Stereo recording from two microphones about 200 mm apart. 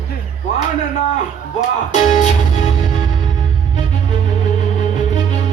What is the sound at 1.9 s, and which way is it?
Music, 35° left (ahead or behind).